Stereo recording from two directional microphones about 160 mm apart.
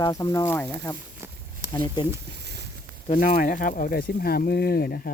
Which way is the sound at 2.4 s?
90° right.